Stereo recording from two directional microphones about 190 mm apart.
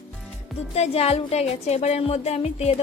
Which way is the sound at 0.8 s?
30° left (ahead or behind).